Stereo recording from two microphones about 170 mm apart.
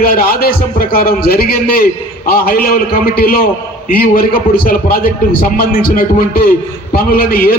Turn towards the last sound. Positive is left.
turn(degrees=60)  # may be behind; listen again after turning